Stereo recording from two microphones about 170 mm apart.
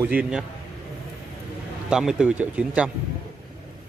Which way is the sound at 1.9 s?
5° right (ahead or behind).